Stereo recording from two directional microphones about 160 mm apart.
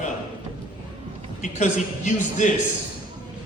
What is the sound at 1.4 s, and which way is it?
A man's voice, 45° left (ahead or behind).